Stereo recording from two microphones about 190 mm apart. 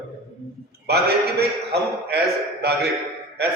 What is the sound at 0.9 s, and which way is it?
A man's voice, 60° right (ahead or behind).